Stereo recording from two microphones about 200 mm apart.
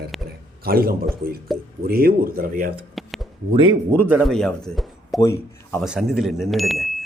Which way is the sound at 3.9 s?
10° right (ahead or behind).